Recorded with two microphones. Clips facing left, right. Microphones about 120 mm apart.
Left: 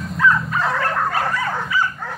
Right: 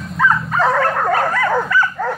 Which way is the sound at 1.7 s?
80° right.